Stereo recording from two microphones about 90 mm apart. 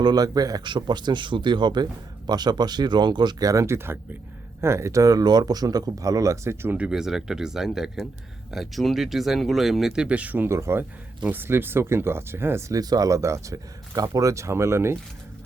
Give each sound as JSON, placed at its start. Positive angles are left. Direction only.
{"t": 0.0, "sound": "a man's voice", "side_deg": -50}
{"t": 0.6, "sound": "speech", "side_deg": -55}
{"t": 3.5, "sound": "speech", "side_deg": -35}
{"t": 6.7, "sound": "speech", "side_deg": -10}
{"t": 12.8, "sound": "speech", "side_deg": -45}